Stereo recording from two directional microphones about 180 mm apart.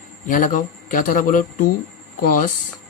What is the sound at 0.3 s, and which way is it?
Speech, 45° left (ahead or behind).